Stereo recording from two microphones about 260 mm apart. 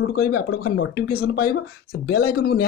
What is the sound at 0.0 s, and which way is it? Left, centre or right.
Speech, left.